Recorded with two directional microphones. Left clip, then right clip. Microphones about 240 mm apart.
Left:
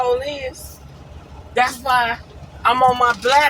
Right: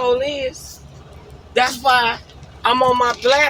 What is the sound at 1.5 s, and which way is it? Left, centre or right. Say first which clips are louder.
Speech: right 2 dB; right.